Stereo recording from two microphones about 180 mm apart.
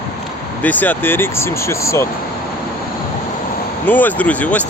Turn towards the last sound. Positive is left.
turn(degrees=10)  # may be behind; listen again after turning